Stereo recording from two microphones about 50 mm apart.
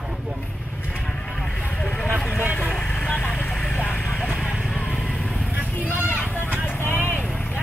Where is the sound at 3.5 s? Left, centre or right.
Centre.